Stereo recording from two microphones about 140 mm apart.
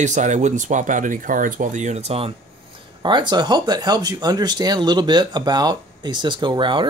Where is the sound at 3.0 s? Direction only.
35° right (ahead or behind).